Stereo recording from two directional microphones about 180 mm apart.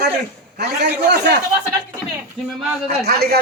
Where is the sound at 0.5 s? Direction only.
65° right (ahead or behind).